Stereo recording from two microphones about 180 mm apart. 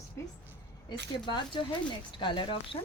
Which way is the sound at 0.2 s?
15° left (ahead or behind).